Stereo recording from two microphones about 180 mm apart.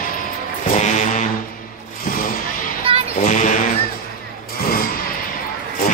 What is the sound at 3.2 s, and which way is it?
Speech, 45° left (ahead or behind).